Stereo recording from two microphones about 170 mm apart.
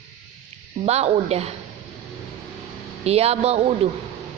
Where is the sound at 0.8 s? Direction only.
40° right (ahead or behind).